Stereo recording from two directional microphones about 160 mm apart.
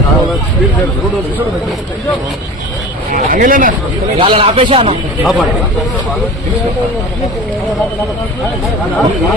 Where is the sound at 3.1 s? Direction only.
55° right (ahead or behind).